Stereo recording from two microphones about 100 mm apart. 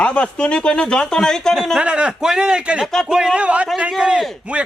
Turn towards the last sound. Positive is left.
turn(degrees=-10)  # may be behind; listen again after turning